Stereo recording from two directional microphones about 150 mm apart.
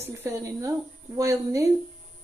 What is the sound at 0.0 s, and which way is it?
A woman's voice, 15° right (ahead or behind).